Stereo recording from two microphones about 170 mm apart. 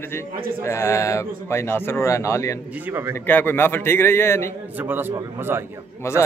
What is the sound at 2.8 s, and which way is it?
Speech, 15° right (ahead or behind).